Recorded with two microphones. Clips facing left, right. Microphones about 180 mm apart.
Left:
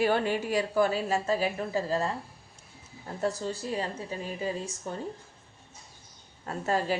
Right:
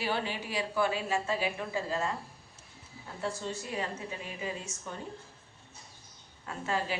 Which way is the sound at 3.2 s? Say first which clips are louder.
Left 5 dB; 40° left (ahead or behind).